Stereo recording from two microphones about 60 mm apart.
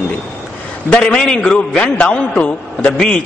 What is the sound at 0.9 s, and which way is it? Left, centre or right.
A man's voice, centre.